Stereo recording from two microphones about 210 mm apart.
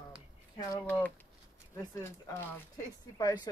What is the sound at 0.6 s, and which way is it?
Speech, 10° left (ahead or behind).